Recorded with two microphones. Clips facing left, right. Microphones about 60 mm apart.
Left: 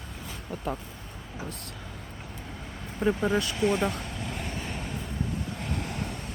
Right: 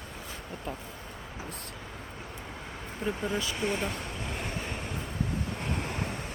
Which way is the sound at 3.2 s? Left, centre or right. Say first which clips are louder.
Left 4 dB; left.